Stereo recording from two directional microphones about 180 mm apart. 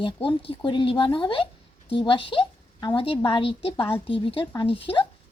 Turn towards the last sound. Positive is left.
turn(degrees=30)  # may be behind; listen again after turning